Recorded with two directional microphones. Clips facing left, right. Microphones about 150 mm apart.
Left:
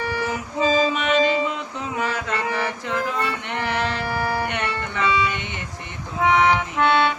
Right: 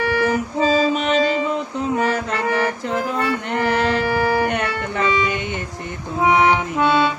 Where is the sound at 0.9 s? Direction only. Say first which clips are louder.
Right 1 dB; 40° right (ahead or behind).